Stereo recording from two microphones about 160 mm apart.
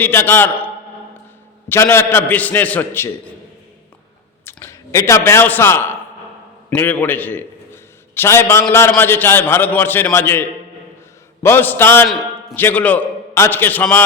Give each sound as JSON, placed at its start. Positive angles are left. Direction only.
{"t": 0.0, "sound": "a man's voice", "side_deg": 15}
{"t": 1.7, "sound": "a man's voice", "side_deg": 15}
{"t": 4.4, "sound": "a man's voice", "side_deg": 20}
{"t": 11.4, "sound": "a man's voice", "side_deg": 15}